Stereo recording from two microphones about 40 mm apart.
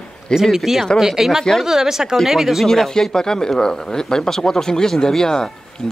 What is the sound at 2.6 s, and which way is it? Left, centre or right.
Speech, centre.